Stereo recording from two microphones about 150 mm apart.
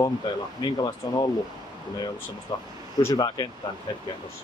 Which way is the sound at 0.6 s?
25° left (ahead or behind).